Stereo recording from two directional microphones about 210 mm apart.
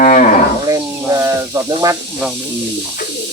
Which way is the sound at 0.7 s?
15° right (ahead or behind).